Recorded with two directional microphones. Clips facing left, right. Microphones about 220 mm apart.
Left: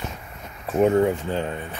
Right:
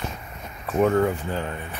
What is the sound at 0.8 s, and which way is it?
Speech, 20° left (ahead or behind).